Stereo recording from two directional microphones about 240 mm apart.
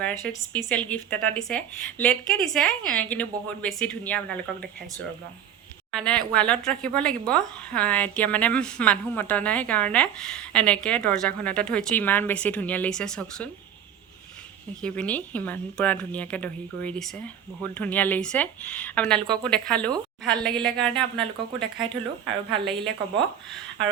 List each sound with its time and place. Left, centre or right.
0.0 s speech: centre
5.9 s speech: centre
14.8 s speech: centre
21.8 s speech: right